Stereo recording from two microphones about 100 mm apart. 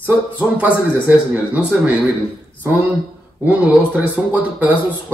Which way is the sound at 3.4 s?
15° right (ahead or behind).